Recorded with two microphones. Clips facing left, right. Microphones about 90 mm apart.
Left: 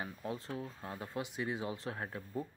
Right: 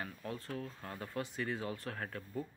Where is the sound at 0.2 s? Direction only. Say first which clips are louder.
Left 2 dB; 20° left (ahead or behind).